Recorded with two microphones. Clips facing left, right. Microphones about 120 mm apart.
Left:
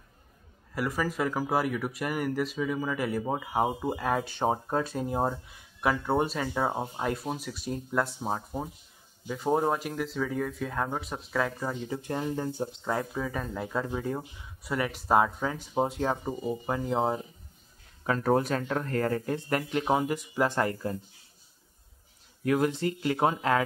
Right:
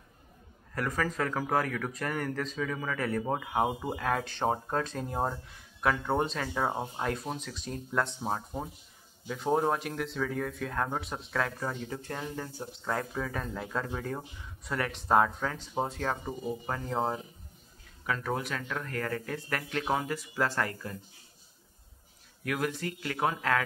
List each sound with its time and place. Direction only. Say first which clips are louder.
0.7 s speech: left 2 dB; 10° left (ahead or behind)
12.9 s speech: even; 5° left (ahead or behind)
18.0 s speech: left 7 dB; 40° left (ahead or behind)
22.4 s speech: left 6 dB; 25° left (ahead or behind)